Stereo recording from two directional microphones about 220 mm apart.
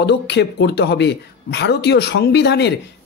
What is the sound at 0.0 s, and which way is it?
Speech, 50° left (ahead or behind).